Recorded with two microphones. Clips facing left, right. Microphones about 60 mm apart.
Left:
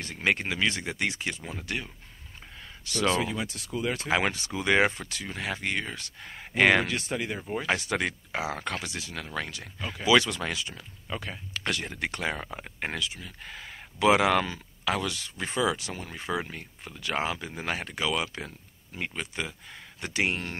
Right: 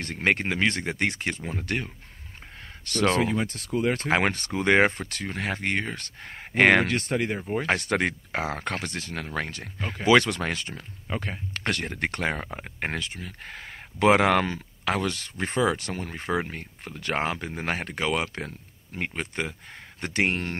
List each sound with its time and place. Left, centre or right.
0.0 s speech: right